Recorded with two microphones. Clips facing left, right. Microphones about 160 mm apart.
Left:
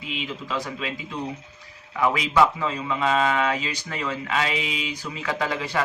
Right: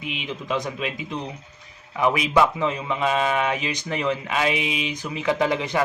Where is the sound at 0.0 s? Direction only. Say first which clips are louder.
Right 1 dB; 20° right (ahead or behind).